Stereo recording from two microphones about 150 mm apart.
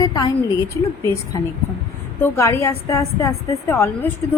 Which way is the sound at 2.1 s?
15° left (ahead or behind).